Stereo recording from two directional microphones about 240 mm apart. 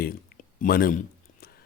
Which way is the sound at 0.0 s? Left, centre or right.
Left.